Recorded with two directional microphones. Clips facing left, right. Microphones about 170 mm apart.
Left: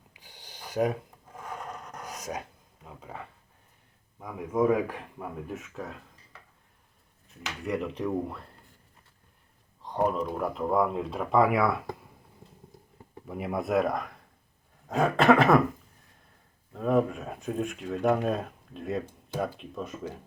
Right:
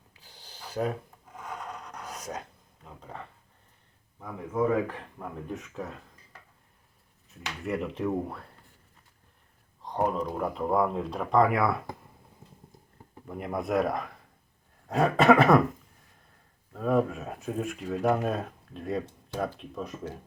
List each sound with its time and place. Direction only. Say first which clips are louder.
0.1 s a sound: left 1 dB; 15° left (ahead or behind)
1.9 s dog: left 3 dB; 10° left (ahead or behind)
4.2 s speech: left 2 dB; 15° left (ahead or behind)
5.5 s speech: right 1 dB; centre (ahead or behind)
7.6 s speech: even; centre (ahead or behind)
9.8 s speech: left 1 dB; centre (ahead or behind)
13.2 s speech: left 1 dB; 5° left (ahead or behind)
16.7 s speech: left 1 dB; centre (ahead or behind)